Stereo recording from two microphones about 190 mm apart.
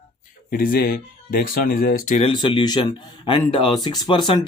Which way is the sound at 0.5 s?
50° left (ahead or behind).